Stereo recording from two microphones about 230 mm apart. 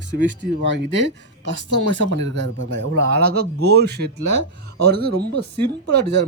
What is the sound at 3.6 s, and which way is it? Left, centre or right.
Speech, right.